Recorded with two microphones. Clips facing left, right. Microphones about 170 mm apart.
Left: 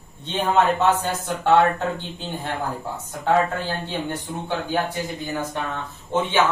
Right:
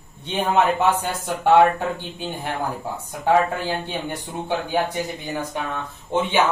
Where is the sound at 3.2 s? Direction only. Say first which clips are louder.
Right 1 dB; 15° right (ahead or behind).